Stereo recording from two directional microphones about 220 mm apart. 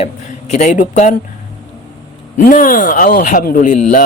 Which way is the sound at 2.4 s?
40° left (ahead or behind).